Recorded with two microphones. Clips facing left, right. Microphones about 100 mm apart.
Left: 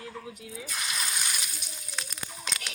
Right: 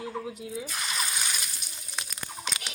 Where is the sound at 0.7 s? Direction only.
Centre (ahead or behind).